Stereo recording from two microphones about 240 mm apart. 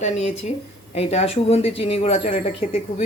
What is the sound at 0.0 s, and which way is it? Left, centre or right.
Speech, left.